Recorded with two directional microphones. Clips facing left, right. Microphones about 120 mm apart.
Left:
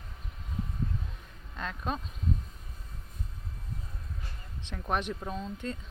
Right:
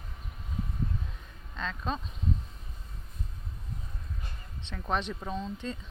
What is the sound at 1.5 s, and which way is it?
Speech, 10° left (ahead or behind).